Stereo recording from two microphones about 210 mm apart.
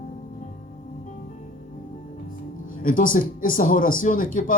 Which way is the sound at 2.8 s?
40° left (ahead or behind).